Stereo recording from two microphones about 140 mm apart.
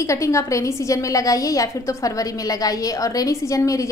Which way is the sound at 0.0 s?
20° left (ahead or behind).